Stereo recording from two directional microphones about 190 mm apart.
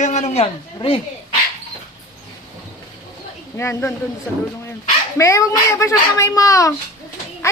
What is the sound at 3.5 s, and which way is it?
Speech, 15° left (ahead or behind).